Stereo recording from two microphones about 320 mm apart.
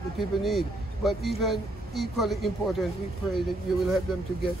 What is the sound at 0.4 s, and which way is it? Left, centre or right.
Speech, centre.